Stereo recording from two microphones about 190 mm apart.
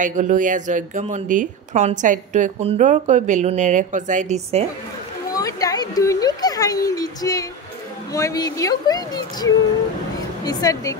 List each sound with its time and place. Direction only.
0.0 s speech: 40° right (ahead or behind)
5.3 s speech: 20° left (ahead or behind)